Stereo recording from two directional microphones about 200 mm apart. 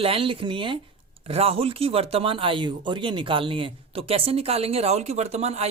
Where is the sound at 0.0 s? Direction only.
25° right (ahead or behind).